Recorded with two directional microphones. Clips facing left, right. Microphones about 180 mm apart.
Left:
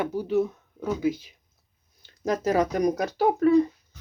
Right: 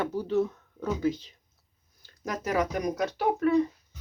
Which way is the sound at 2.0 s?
30° left (ahead or behind).